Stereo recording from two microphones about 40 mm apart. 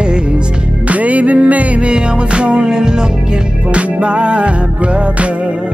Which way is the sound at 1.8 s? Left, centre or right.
Right.